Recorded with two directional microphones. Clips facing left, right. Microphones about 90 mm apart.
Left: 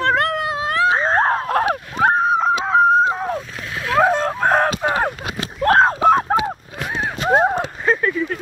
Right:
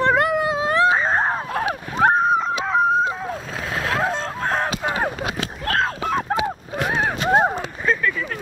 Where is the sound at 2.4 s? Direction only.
35° left (ahead or behind).